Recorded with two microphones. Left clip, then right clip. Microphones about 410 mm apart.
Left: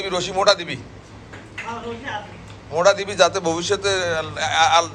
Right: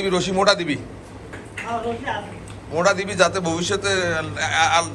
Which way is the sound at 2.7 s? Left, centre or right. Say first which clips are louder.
Left 2 dB; centre.